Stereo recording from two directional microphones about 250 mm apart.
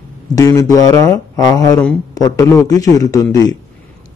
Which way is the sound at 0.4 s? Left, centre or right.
Centre.